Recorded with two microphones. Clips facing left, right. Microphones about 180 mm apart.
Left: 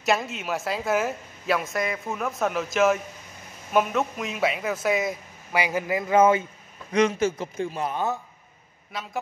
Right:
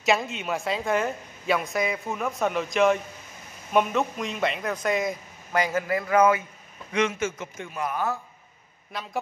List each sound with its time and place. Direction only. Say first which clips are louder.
0.0 s speech: even; centre (ahead or behind); by 6.4 s 25° left (ahead or behind)
6.9 s a man's voice: left 4 dB; 35° left (ahead or behind)